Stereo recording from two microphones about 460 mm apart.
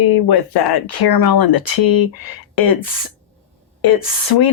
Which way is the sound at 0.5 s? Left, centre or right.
Left.